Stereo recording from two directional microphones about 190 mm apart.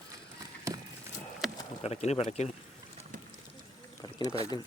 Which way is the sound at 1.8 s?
35° left (ahead or behind).